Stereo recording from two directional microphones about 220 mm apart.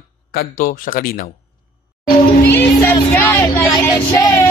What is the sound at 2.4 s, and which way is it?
Speech, 10° left (ahead or behind).